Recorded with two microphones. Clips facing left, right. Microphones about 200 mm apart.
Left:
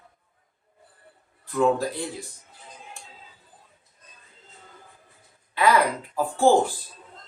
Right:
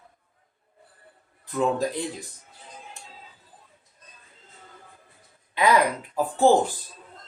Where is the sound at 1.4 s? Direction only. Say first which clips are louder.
Left 2 dB; 20° right (ahead or behind).